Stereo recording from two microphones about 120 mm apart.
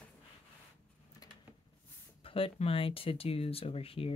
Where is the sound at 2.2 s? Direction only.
50° left (ahead or behind).